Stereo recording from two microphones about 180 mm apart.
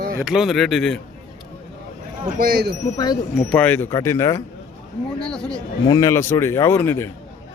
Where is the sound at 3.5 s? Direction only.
10° left (ahead or behind).